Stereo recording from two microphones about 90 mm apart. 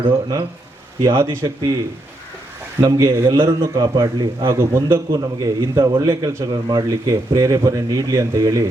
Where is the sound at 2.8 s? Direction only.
40° right (ahead or behind).